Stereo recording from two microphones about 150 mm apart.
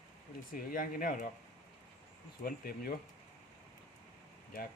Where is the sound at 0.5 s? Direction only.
75° left (ahead or behind).